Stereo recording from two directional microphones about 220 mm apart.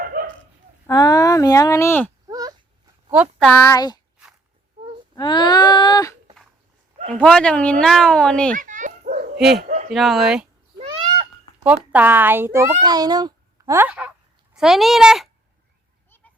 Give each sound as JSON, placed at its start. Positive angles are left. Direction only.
{"t": 0.0, "sound": "dog", "side_deg": -40}
{"t": 0.9, "sound": "speech", "side_deg": 15}
{"t": 2.3, "sound": "a sound", "side_deg": -15}
{"t": 3.1, "sound": "speech", "side_deg": -5}
{"t": 3.7, "sound": "speech", "side_deg": 20}
{"t": 5.1, "sound": "a sound", "side_deg": 20}
{"t": 7.2, "sound": "speech", "side_deg": 5}
{"t": 8.5, "sound": "dog", "side_deg": -35}
{"t": 9.6, "sound": "a sound", "side_deg": -40}
{"t": 9.9, "sound": "speech", "side_deg": 0}
{"t": 11.6, "sound": "a child's voice", "side_deg": -5}
{"t": 16.0, "sound": "a sound", "side_deg": 10}